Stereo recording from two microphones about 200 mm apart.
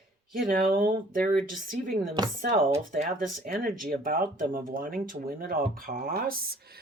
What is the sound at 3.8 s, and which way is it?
Speech, 45° right (ahead or behind).